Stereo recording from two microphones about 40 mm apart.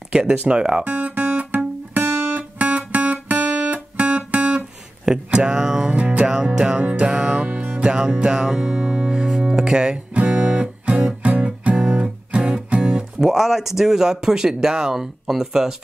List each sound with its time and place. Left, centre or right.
0.3 s music: right
0.8 s guitar: right
2.0 s music: right
5.6 s speech: centre
5.9 s music: right
6.2 s music: centre
7.4 s music: right
7.9 s music: right
10.1 s music: right
13.3 s speech: centre